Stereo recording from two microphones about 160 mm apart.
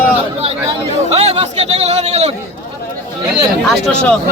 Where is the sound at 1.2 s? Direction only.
40° right (ahead or behind).